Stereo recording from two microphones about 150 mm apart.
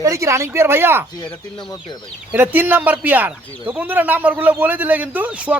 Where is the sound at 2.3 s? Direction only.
15° right (ahead or behind).